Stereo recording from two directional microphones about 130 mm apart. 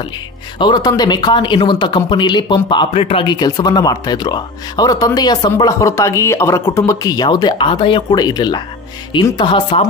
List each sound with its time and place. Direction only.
0.6 s speech: 35° left (ahead or behind)
3.3 s speech: 30° left (ahead or behind)